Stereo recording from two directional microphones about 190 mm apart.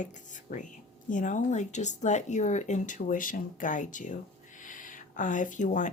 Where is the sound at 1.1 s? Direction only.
40° left (ahead or behind).